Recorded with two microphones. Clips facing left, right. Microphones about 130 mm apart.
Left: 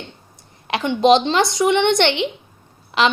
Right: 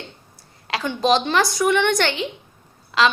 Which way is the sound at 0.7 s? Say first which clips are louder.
Left 5 dB; 25° left (ahead or behind).